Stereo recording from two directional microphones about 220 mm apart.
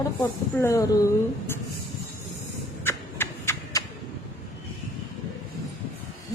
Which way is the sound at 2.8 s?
10° left (ahead or behind).